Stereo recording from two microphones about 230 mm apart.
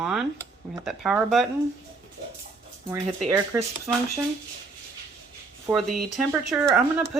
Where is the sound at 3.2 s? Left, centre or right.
Centre.